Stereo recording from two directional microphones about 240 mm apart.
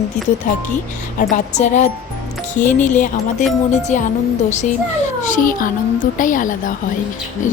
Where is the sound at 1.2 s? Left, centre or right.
Left.